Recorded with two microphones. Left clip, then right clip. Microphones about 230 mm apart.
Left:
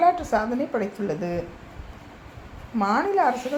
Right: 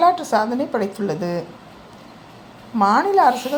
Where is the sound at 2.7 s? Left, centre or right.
Centre.